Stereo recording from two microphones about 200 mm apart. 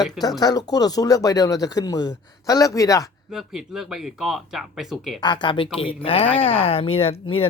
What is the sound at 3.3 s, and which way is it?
Speech, centre (ahead or behind).